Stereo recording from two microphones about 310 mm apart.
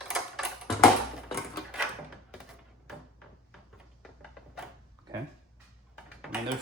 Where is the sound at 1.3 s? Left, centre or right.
Centre.